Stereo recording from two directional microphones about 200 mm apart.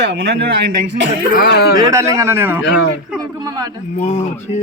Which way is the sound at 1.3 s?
50° left (ahead or behind).